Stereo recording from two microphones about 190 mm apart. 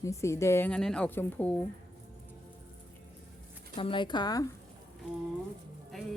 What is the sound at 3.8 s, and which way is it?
Speech, 25° left (ahead or behind).